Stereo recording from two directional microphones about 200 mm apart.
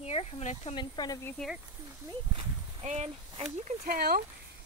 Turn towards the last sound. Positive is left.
turn(degrees=-50)  # may be behind; listen again after turning